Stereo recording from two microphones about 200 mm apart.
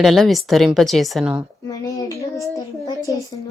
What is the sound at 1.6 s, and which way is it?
A child's voice, 15° left (ahead or behind).